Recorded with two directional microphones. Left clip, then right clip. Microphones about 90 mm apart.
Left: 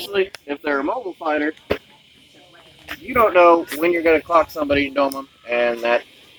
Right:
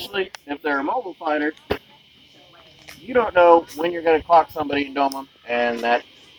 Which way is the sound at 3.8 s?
30° right (ahead or behind).